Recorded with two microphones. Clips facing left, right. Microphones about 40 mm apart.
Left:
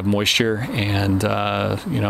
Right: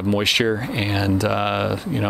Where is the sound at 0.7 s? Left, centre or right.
Centre.